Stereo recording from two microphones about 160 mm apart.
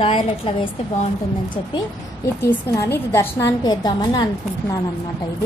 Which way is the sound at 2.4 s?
15° left (ahead or behind).